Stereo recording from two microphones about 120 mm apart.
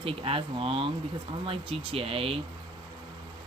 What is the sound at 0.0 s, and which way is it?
Speech, 50° right (ahead or behind).